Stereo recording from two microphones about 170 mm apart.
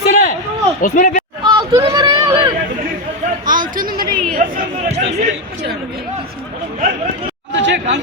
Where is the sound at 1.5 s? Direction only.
25° right (ahead or behind).